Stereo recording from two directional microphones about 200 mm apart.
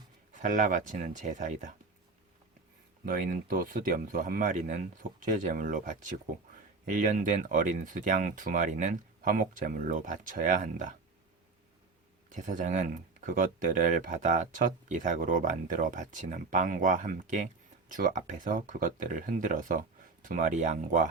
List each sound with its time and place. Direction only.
0.3 s speech: 40° right (ahead or behind)
3.1 s speech: 45° right (ahead or behind)
12.3 s speech: 40° right (ahead or behind)